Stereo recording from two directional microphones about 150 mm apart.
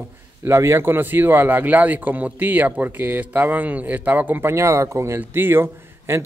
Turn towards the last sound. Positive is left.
turn(degrees=-15)  # may be behind; listen again after turning